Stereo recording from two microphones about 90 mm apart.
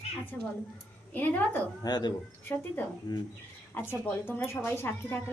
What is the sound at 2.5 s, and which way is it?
Speech, 20° left (ahead or behind).